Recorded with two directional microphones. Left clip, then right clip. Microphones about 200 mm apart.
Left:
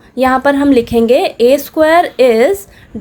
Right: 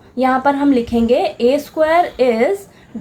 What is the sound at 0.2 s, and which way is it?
A woman's voice, 45° left (ahead or behind).